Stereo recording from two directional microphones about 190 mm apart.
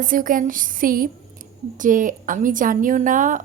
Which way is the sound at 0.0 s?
45° right (ahead or behind).